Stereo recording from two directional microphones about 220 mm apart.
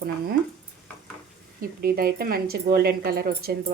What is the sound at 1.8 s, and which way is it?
Speech, 45° right (ahead or behind).